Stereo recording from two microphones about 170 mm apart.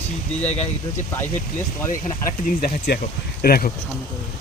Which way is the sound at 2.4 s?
60° left (ahead or behind).